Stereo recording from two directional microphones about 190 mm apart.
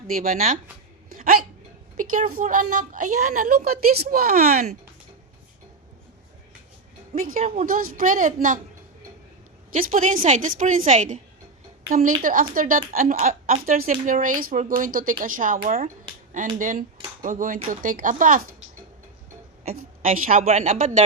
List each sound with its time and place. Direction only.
0.2 s a woman's voice: 45° right (ahead or behind)
1.1 s hiccup: 50° right (ahead or behind)
2.0 s a woman's voice: 45° right (ahead or behind)
7.2 s a woman's voice: 45° right (ahead or behind)
9.7 s a woman's voice: 45° right (ahead or behind)
20.2 s speech: 40° right (ahead or behind)